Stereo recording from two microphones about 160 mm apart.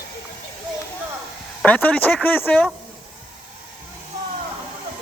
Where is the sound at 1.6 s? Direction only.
10° left (ahead or behind).